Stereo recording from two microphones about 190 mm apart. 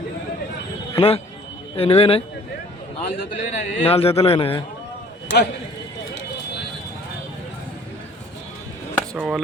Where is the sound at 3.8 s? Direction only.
30° left (ahead or behind).